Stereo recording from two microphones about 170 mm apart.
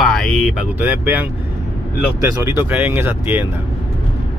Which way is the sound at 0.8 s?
10° right (ahead or behind).